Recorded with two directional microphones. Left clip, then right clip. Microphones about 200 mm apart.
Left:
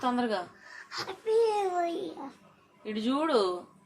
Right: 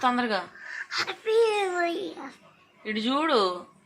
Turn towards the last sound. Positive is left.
turn(degrees=-15)  # may be behind; listen again after turning